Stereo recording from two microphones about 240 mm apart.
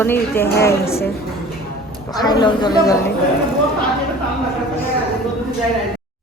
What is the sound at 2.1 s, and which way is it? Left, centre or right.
Speech, centre.